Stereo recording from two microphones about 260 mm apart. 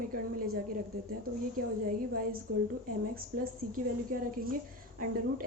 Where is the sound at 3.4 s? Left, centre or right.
Right.